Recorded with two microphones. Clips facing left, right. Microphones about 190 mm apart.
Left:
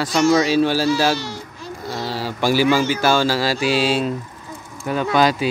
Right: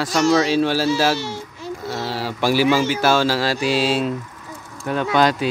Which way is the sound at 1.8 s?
Centre (ahead or behind).